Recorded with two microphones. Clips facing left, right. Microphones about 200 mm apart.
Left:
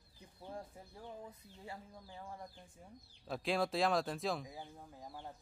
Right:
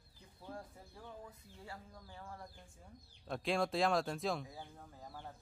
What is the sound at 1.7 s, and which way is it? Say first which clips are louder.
Speech: left 3 dB; 20° left (ahead or behind).